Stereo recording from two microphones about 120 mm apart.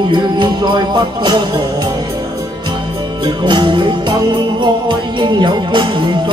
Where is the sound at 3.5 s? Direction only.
40° right (ahead or behind).